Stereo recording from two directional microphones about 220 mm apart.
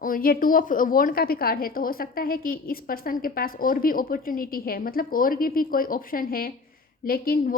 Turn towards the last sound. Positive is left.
turn(degrees=40)  # may be behind; listen again after turning